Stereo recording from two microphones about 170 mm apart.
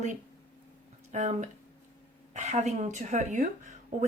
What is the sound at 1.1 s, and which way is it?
A woman's voice, 45° right (ahead or behind).